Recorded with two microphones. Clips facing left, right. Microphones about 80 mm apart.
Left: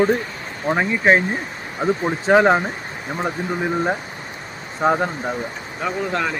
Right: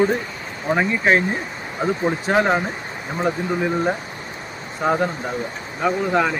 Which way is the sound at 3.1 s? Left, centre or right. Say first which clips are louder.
Right 2 dB; centre.